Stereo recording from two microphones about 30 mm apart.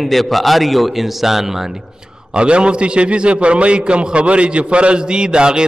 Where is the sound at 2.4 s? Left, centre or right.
Right.